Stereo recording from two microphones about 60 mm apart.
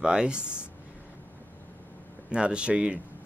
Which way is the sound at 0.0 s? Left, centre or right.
Centre.